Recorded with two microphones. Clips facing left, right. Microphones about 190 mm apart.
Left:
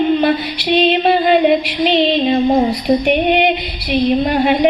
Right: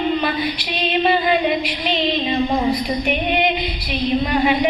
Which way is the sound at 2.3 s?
35° left (ahead or behind).